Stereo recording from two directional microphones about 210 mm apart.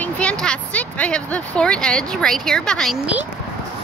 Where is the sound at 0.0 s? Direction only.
5° left (ahead or behind).